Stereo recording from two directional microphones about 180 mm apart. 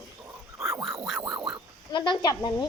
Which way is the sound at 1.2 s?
25° right (ahead or behind).